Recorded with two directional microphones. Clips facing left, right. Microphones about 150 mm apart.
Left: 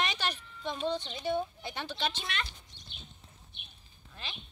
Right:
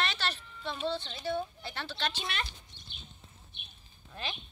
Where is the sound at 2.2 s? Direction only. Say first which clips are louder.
Right 1 dB; 35° right (ahead or behind).